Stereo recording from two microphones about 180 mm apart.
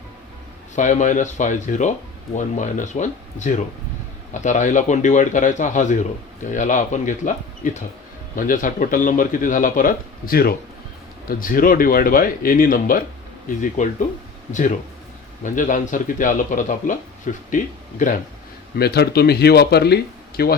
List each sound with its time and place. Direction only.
0.8 s speech: 45° left (ahead or behind)
18.8 s speech: 60° left (ahead or behind)